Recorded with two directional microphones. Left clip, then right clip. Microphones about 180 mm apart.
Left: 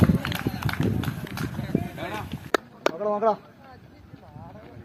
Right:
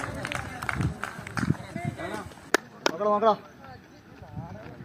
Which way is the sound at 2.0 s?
75° right (ahead or behind).